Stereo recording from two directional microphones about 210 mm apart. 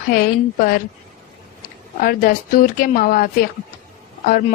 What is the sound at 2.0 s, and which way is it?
Speech, 45° left (ahead or behind).